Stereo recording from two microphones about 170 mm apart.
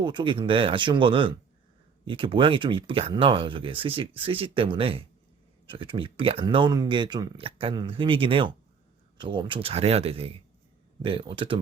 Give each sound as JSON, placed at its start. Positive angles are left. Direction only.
{"t": 0.0, "sound": "speech", "side_deg": -25}